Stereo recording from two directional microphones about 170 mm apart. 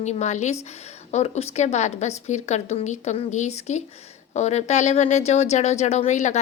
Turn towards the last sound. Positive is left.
turn(degrees=45)  # may be behind; listen again after turning